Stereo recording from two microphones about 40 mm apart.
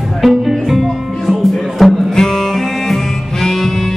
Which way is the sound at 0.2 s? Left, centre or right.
Centre.